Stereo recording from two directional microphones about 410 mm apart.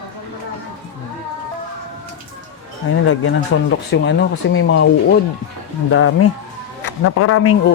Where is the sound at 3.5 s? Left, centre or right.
Left.